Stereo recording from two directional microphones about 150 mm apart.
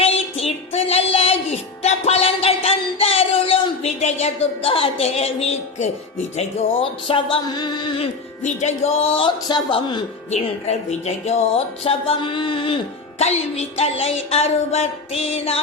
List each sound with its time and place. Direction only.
0.0 s music: 40° left (ahead or behind)
6.3 s speech: 40° left (ahead or behind)
8.4 s speech: 45° left (ahead or behind); by 10.0 s 30° left (ahead or behind)
10.3 s speech: 45° left (ahead or behind)